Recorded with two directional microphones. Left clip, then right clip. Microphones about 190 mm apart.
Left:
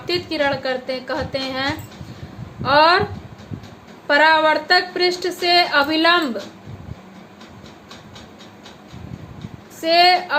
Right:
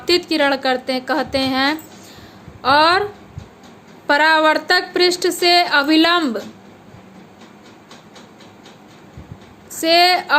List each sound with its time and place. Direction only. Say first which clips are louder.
0.0 s a woman's voice: right 4 dB; 60° right (ahead or behind)
4.0 s a woman's voice: right 1 dB; 60° right (ahead or behind)
9.8 s a woman's voice: right 1 dB; 60° right (ahead or behind)